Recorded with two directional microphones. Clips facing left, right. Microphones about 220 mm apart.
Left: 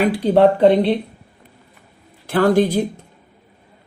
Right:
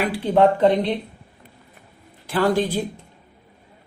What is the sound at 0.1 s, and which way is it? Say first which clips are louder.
Speech: left 4 dB; 35° left (ahead or behind).